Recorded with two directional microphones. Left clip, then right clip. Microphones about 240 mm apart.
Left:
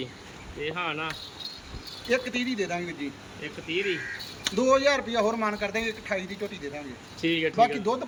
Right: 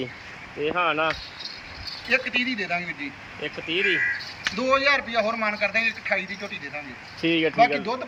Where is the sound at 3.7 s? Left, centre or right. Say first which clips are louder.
Right 5 dB; centre.